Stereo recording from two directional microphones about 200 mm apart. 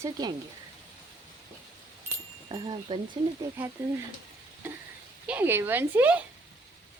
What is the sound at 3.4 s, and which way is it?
Speech, 15° right (ahead or behind).